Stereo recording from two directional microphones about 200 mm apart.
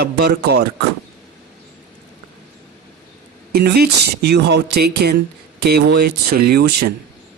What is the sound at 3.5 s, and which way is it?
Speech, 50° right (ahead or behind).